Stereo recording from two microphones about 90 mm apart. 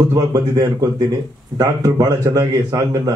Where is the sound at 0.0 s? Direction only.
45° right (ahead or behind).